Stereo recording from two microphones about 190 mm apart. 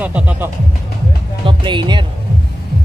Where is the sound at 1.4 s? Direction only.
25° right (ahead or behind).